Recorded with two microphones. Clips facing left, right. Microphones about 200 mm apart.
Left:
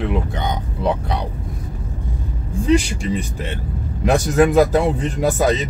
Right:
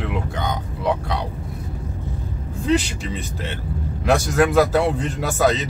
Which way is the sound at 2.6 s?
10° left (ahead or behind).